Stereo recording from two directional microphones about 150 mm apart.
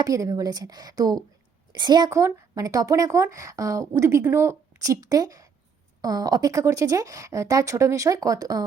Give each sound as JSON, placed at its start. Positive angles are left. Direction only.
{"t": 0.0, "sound": "speech", "side_deg": -25}